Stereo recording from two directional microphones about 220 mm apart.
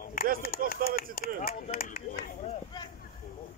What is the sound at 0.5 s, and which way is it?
Speech, 40° left (ahead or behind).